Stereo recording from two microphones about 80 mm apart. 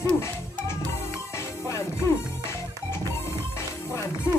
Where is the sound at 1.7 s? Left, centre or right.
Left.